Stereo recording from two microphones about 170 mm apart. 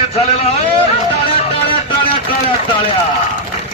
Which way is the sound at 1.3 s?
35° left (ahead or behind).